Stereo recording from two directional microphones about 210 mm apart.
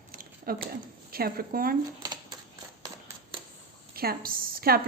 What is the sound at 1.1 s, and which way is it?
Speech, 45° right (ahead or behind).